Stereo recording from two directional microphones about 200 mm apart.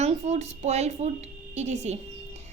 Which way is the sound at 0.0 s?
35° right (ahead or behind).